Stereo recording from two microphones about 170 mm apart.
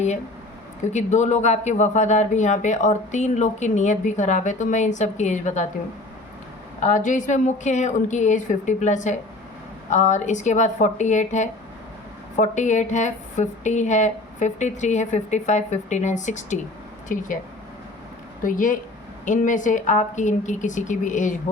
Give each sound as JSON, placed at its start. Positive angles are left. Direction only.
{"t": 0.9, "sound": "speech", "side_deg": 40}
{"t": 6.7, "sound": "speech", "side_deg": 45}
{"t": 18.4, "sound": "speech", "side_deg": 50}